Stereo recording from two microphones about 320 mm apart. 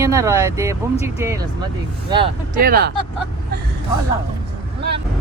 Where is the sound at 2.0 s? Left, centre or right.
Centre.